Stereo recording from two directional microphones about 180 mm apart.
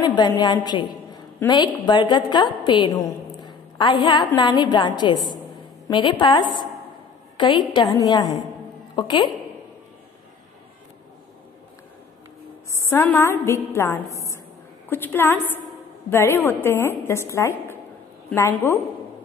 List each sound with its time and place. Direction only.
0.0 s a woman's voice: 25° left (ahead or behind)
12.7 s a woman's voice: 15° left (ahead or behind)